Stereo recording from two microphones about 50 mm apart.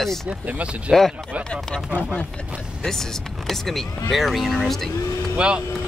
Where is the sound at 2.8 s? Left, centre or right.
Centre.